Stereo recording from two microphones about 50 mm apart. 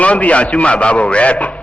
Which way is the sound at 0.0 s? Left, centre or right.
Left.